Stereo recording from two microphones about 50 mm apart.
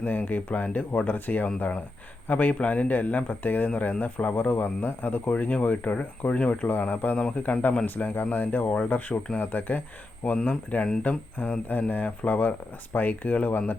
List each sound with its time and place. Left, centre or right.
0.0 s speech: left
5.3 s speech: left
7.9 s speech: left
8.6 s speech: left
10.3 s speech: left